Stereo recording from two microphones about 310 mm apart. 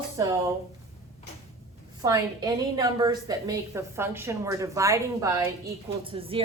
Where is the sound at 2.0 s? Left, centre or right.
Centre.